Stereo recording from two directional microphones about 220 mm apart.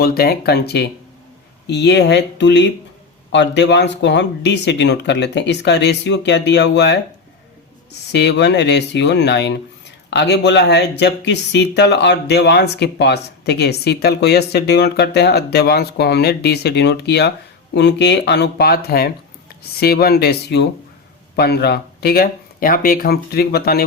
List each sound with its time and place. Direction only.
0.0 s speech: 45° left (ahead or behind)
8.1 s speech: 50° left (ahead or behind)